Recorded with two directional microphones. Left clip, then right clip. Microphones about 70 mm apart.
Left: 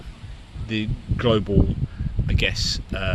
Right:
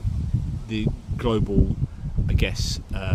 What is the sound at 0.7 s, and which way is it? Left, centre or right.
Speech, right.